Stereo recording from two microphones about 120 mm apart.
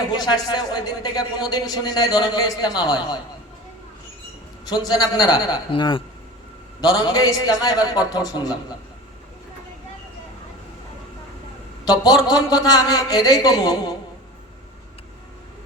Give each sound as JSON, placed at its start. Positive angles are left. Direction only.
{"t": 0.2, "sound": "speech", "side_deg": 35}
{"t": 4.6, "sound": "speech", "side_deg": 35}
{"t": 11.9, "sound": "speech", "side_deg": 35}